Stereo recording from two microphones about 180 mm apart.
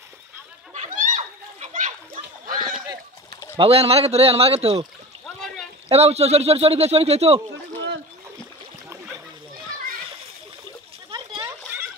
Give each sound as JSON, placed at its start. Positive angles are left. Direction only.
{"t": 0.7, "sound": "a sound", "side_deg": -45}
{"t": 3.5, "sound": "speech", "side_deg": -30}
{"t": 5.9, "sound": "speech", "side_deg": -35}
{"t": 11.1, "sound": "splash", "side_deg": -25}